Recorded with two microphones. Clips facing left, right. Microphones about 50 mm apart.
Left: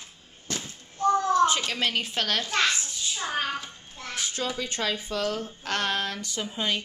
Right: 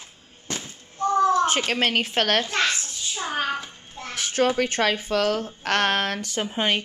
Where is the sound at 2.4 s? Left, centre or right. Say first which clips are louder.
Right 1 dB; centre.